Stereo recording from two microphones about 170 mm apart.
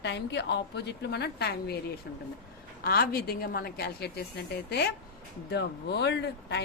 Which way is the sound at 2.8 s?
65° left (ahead or behind).